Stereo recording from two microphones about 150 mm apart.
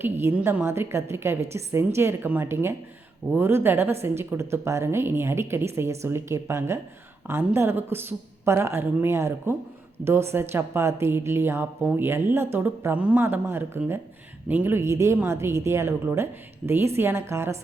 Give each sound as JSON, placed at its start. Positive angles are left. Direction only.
{"t": 0.0, "sound": "a woman's voice", "side_deg": -15}